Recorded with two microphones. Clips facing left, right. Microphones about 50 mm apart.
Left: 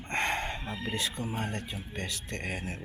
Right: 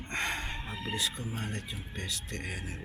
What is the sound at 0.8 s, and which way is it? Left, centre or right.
Speech, left.